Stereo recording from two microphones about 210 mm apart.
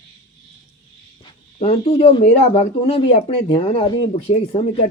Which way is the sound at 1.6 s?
30° left (ahead or behind).